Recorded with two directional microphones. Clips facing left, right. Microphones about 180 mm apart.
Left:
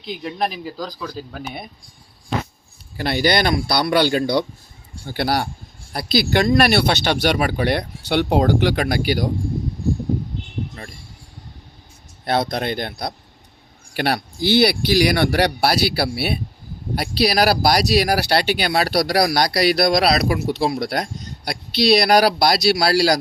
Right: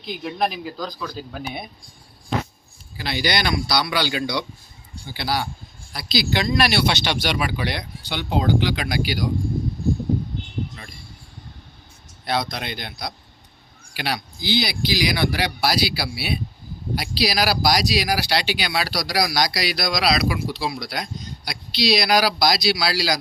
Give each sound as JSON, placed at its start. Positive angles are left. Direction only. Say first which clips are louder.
{"t": 0.2, "sound": "speech", "louder": "right 1 dB", "side_deg": 0}
{"t": 3.0, "sound": "a man's voice", "louder": "left 6 dB", "side_deg": 50}
{"t": 12.2, "sound": "a man's voice", "louder": "left 5 dB", "side_deg": 55}
{"t": 22.0, "sound": "speech", "louder": "left 4 dB", "side_deg": 60}